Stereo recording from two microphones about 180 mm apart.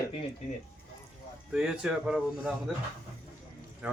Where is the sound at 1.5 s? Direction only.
5° right (ahead or behind).